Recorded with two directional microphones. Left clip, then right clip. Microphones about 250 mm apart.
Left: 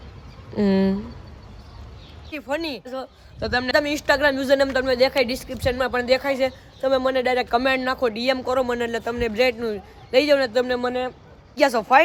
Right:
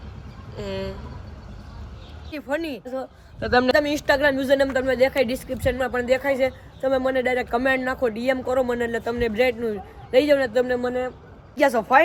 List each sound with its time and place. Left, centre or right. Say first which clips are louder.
0.5 s speech: left 9 dB; left
2.3 s speech: even; centre